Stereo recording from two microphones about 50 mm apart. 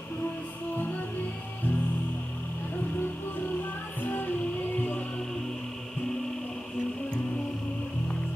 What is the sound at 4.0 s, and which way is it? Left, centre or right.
Music, left.